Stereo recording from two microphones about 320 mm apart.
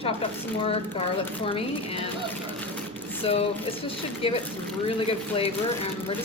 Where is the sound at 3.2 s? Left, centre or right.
Centre.